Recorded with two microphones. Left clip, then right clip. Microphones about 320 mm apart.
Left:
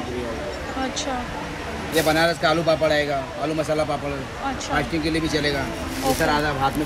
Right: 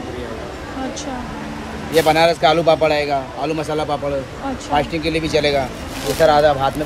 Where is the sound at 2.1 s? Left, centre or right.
Right.